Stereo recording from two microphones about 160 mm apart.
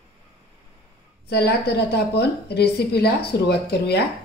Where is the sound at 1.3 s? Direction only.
90° left.